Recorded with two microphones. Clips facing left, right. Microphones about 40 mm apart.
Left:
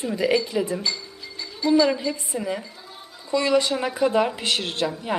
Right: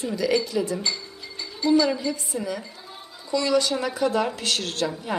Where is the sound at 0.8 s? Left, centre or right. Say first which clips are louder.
Left 1 dB; centre.